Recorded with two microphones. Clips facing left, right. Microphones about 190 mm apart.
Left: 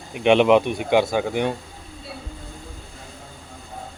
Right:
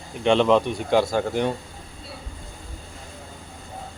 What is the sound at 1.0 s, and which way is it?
Speech, centre (ahead or behind).